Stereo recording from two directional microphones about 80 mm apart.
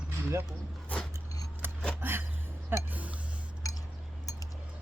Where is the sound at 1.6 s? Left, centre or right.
Right.